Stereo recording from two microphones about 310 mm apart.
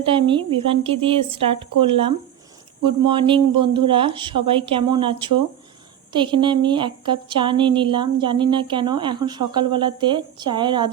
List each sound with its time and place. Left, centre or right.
0.0 s a woman's voice: centre